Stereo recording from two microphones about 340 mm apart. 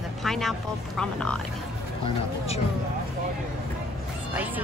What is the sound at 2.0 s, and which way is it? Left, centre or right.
Speech, centre.